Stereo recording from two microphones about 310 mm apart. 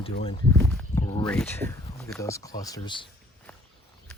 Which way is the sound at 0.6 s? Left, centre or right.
Centre.